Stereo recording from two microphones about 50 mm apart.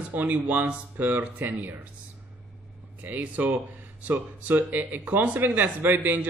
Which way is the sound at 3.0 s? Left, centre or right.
Right.